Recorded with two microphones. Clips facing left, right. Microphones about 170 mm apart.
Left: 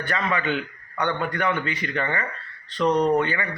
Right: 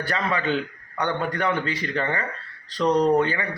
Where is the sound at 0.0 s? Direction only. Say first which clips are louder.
Even; 35° right (ahead or behind).